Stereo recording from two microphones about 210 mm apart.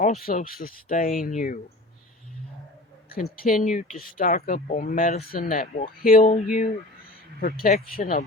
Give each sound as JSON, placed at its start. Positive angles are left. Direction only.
{"t": 0.0, "sound": "speech", "side_deg": 40}
{"t": 3.1, "sound": "speech", "side_deg": 45}